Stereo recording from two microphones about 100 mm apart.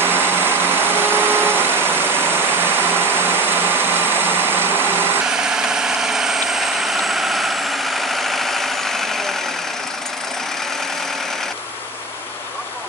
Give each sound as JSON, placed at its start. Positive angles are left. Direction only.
{"t": 0.0, "sound": "vehicle", "side_deg": -20}
{"t": 5.3, "sound": "vehicle", "side_deg": -5}